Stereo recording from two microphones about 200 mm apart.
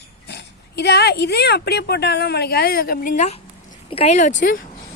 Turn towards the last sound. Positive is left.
turn(degrees=40)  # may be behind; listen again after turning